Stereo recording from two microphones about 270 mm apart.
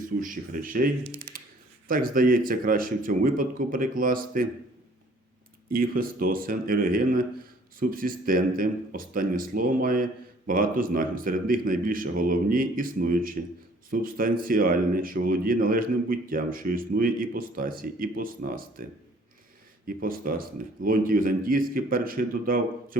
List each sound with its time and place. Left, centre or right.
0.2 s speech: right
1.9 s speech: right
5.6 s speech: right
20.0 s speech: right